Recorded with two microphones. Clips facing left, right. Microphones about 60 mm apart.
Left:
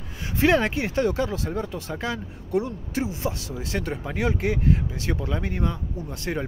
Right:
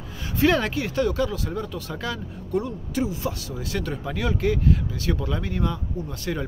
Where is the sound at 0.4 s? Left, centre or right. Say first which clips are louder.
Left 1 dB; left.